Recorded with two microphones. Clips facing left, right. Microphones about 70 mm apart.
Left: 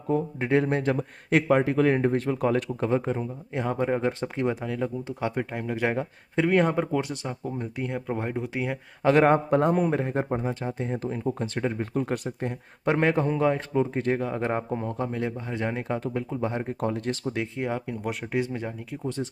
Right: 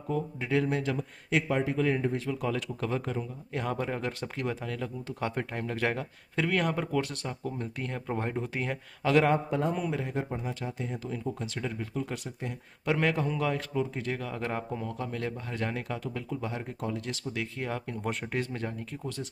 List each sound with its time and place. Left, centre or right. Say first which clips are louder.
0.1 s speech: left 6 dB; left
2.8 s speech: left 6 dB; left
5.3 s speech: left 4 dB; centre
9.0 s speech: left 5 dB; left
17.4 s speech: left 5 dB; centre